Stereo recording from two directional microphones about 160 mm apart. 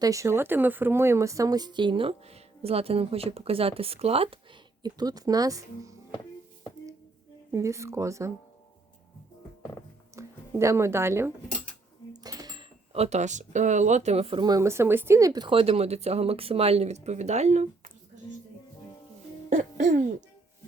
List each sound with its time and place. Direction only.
0.0 s speech: 20° right (ahead or behind); by 4.4 s 35° right (ahead or behind)
4.8 s speech: 25° right (ahead or behind)
7.5 s speech: 20° right (ahead or behind)
10.2 s speech: 20° right (ahead or behind)
12.1 s cash register: 25° right (ahead or behind)
12.9 s speech: 40° right (ahead or behind)
19.5 s music: 50° right (ahead or behind)